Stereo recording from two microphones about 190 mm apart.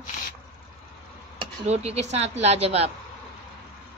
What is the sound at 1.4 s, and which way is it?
Speech, 35° right (ahead or behind).